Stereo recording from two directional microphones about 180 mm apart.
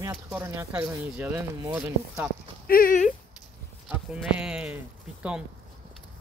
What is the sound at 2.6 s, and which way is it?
Clip-clop, 55° left (ahead or behind).